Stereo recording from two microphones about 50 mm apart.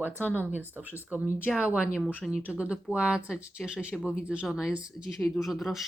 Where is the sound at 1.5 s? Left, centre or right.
Centre.